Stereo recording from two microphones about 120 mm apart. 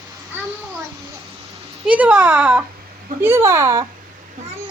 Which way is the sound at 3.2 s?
20° right (ahead or behind).